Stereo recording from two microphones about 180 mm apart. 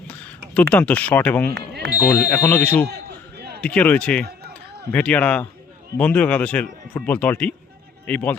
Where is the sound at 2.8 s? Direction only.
65° right (ahead or behind).